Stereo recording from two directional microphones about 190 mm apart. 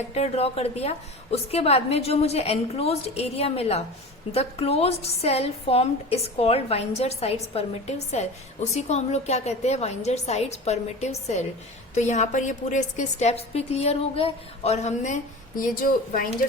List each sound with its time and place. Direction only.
0.1 s a woman's voice: 35° left (ahead or behind)